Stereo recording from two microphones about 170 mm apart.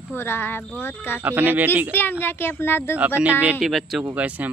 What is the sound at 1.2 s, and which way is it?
Speech, 10° right (ahead or behind).